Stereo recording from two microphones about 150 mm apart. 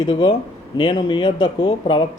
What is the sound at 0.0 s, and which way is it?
Speech, 35° left (ahead or behind).